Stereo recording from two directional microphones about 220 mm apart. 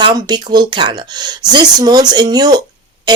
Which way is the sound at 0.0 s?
20° right (ahead or behind).